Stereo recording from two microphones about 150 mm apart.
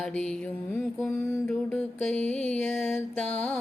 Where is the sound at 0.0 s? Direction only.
5° left (ahead or behind).